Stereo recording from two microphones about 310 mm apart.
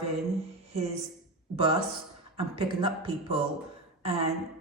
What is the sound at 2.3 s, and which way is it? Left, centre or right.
Speech, centre.